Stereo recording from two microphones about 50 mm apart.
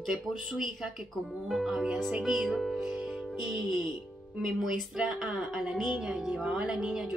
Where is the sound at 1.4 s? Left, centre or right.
Centre.